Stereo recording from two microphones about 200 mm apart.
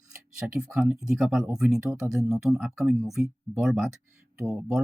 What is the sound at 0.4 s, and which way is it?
Speech, 5° right (ahead or behind).